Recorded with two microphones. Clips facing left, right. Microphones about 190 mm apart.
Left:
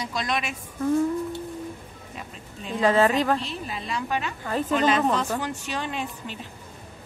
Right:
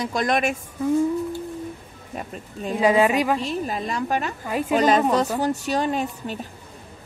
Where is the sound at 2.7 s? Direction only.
10° right (ahead or behind).